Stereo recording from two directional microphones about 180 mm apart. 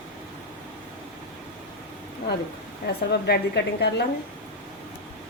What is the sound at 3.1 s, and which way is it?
Speech, 65° left (ahead or behind).